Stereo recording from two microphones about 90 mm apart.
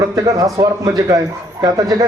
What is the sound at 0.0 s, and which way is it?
A man's voice, 40° right (ahead or behind).